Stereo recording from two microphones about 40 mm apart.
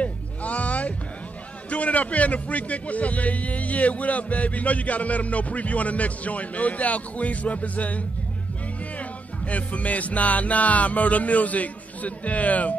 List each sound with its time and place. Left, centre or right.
0.0 s music: left
1.7 s a man's voice: left
9.5 s a man's voice: left